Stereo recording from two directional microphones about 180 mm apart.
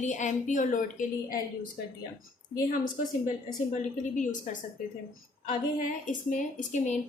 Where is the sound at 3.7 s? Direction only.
45° left (ahead or behind).